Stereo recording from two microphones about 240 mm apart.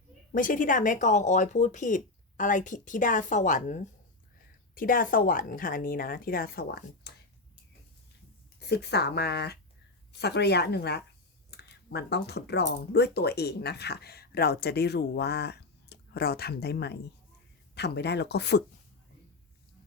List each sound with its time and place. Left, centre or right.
0.3 s a woman's voice: left
8.5 s speech: left